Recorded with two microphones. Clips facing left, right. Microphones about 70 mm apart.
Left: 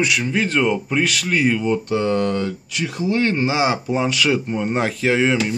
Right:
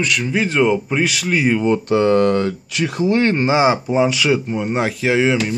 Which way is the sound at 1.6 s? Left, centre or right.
Right.